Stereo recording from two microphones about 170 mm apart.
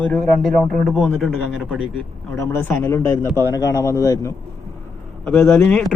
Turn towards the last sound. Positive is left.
turn(degrees=15)  # may be behind; listen again after turning